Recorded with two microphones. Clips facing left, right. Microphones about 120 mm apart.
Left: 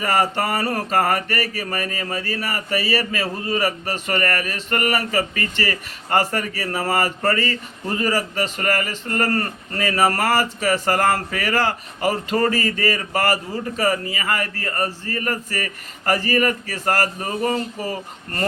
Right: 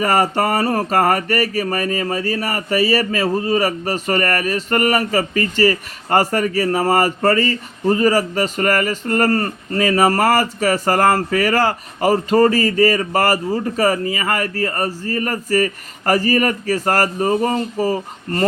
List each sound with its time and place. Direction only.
0.0 s mantra: 40° right (ahead or behind)
0.7 s speech: 40° right (ahead or behind)
9.3 s speech: 30° right (ahead or behind)
10.0 s speech: 45° right (ahead or behind)